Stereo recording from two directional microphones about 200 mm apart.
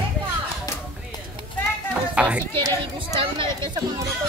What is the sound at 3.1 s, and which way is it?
Chatter, 25° right (ahead or behind).